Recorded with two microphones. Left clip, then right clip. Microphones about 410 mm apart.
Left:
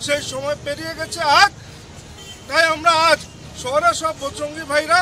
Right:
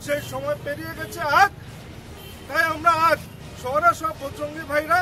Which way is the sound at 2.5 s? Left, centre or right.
Right.